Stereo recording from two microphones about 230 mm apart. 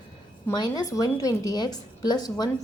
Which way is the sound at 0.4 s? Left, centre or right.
Centre.